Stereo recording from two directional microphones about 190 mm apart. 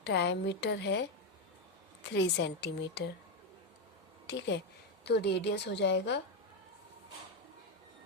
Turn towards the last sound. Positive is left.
turn(degrees=65)  # may be behind; listen again after turning